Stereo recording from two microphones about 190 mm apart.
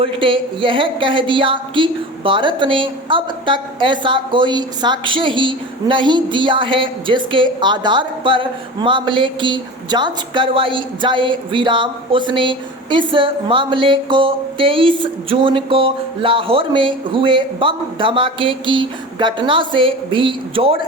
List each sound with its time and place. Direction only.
0.0 s a woman's voice: 25° right (ahead or behind)